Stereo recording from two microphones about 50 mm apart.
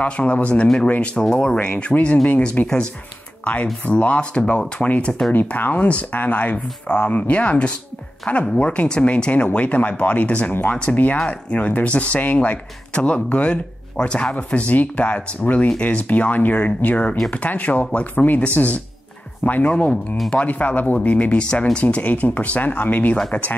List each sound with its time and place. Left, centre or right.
0.0 s speech: left
1.3 s speech: centre
3.8 s speech: left
5.3 s speech: left
21.4 s speech: centre
21.8 s speech: left